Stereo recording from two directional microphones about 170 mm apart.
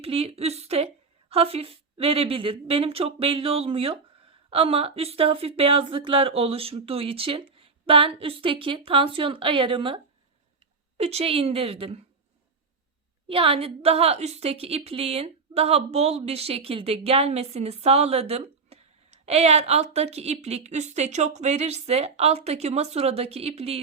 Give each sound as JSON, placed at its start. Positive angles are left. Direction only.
{"t": 0.0, "sound": "a woman's voice", "side_deg": -35}
{"t": 13.2, "sound": "a woman's voice", "side_deg": -30}